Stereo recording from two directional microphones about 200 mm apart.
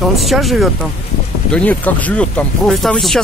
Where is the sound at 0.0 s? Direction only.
Centre (ahead or behind).